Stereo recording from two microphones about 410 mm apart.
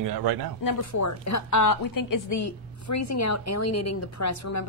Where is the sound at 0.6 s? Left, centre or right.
Left.